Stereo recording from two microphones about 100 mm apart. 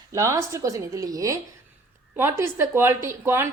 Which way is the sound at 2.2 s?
25° right (ahead or behind).